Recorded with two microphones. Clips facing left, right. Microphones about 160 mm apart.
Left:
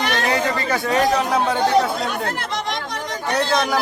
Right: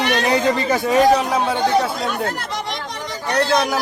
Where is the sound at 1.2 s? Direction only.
Centre (ahead or behind).